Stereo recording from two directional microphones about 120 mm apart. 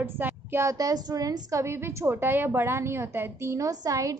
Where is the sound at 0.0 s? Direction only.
20° right (ahead or behind).